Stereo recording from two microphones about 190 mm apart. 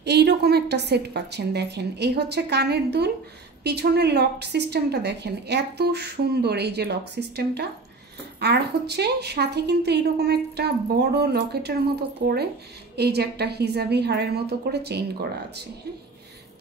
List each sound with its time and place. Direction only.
0.0 s a woman's voice: 60° right (ahead or behind)